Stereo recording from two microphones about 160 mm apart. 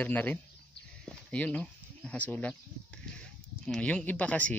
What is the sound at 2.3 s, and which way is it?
Speech, 10° left (ahead or behind).